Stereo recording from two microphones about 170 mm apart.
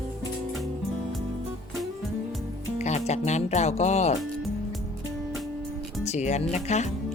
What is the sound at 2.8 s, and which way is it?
Speech, 40° left (ahead or behind).